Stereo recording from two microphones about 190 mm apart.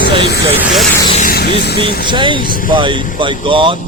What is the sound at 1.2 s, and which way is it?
Speech, 50° left (ahead or behind).